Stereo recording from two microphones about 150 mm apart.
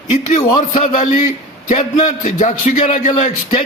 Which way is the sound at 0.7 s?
55° left (ahead or behind).